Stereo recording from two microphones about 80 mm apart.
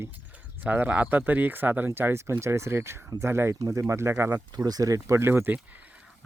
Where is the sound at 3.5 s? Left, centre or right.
Right.